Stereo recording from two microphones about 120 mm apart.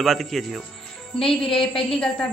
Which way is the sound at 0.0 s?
Centre (ahead or behind).